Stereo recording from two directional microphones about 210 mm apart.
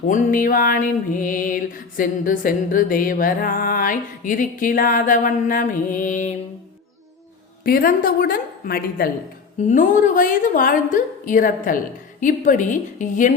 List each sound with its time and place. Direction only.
0.1 s music: 40° left (ahead or behind)
7.6 s a woman's voice: 45° left (ahead or behind)
9.6 s music: 40° left (ahead or behind)